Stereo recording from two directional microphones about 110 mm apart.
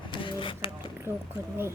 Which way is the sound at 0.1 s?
50° left (ahead or behind).